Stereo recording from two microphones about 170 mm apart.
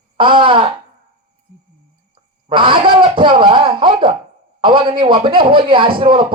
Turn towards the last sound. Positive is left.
turn(degrees=-30)  # may be behind; listen again after turning